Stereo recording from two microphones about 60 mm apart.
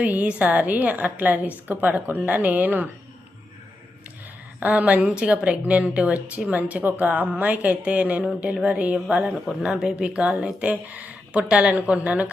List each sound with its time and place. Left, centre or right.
0.0 s a woman's voice: right
4.6 s a woman's voice: right